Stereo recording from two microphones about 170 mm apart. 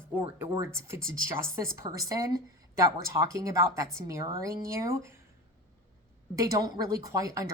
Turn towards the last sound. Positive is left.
turn(degrees=-20)  # may be behind; listen again after turning